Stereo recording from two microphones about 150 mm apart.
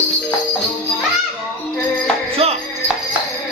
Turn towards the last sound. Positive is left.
turn(degrees=-40)  # may be behind; listen again after turning